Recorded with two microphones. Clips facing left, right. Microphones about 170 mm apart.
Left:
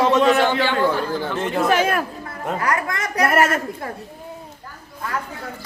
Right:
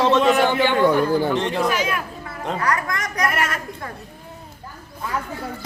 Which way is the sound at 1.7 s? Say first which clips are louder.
Left 5 dB; 50° left (ahead or behind).